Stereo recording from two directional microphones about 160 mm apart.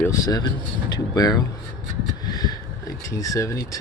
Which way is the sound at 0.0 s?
20° left (ahead or behind).